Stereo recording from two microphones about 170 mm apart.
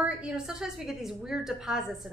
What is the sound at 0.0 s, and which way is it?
Speech, 5° right (ahead or behind).